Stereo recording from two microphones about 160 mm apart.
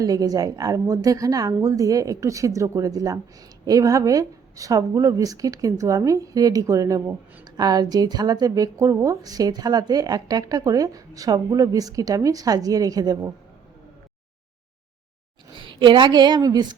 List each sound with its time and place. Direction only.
0.0 s speech: 20° right (ahead or behind)
15.5 s a woman's voice: 30° right (ahead or behind)